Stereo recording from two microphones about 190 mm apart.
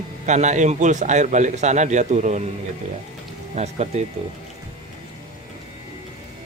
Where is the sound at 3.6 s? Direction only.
35° right (ahead or behind).